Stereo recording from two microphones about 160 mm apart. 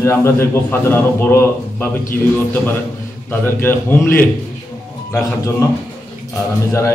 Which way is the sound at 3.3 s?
15° left (ahead or behind).